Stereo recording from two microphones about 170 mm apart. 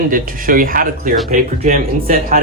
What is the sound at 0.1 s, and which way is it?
A man's voice, 55° right (ahead or behind).